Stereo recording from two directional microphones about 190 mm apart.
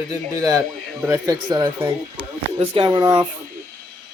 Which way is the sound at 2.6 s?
25° right (ahead or behind).